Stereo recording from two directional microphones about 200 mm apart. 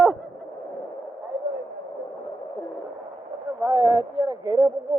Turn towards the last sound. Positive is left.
turn(degrees=-20)  # may be behind; listen again after turning